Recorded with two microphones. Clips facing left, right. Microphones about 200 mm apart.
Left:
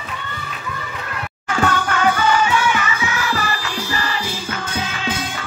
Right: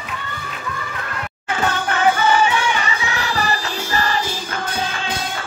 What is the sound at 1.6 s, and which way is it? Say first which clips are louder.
Music: even; 25° right (ahead or behind).